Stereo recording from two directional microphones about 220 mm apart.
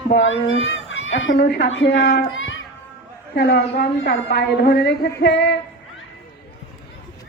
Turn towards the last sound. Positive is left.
turn(degrees=50)  # may be behind; listen again after turning